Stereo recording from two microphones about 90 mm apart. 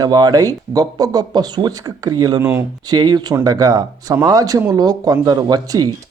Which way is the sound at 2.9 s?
50° right (ahead or behind).